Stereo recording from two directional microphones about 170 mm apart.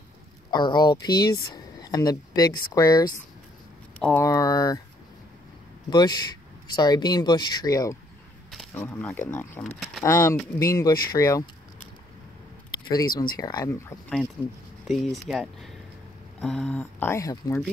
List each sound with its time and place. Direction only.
0.5 s speech: 25° left (ahead or behind)
4.2 s speech: 20° left (ahead or behind)
5.9 s speech: 25° left (ahead or behind); by 10.0 s 5° left (ahead or behind)
10.0 s speech: 15° left (ahead or behind)
13.0 s speech: 60° left (ahead or behind)
13.4 s speech: 20° left (ahead or behind)
14.9 s speech: centre (ahead or behind); by 17.6 s 15° left (ahead or behind)